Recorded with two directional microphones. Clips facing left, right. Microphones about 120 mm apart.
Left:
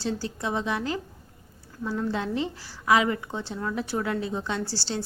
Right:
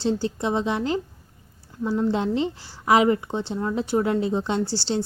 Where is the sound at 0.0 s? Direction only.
25° right (ahead or behind).